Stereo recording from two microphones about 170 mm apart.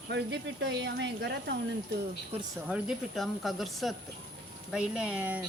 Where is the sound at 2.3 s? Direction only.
35° right (ahead or behind).